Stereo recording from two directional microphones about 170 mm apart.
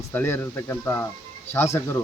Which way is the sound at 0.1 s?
10° left (ahead or behind).